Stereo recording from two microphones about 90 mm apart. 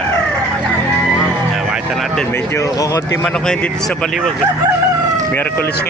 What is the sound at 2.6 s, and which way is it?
Speech, 40° left (ahead or behind).